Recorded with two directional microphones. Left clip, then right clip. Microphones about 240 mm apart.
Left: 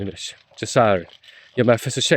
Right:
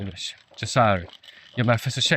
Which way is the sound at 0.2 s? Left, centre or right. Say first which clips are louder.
Even; left.